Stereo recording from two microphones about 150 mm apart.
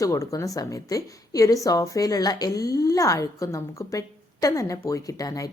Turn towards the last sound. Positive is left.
turn(degrees=20)  # may be behind; listen again after turning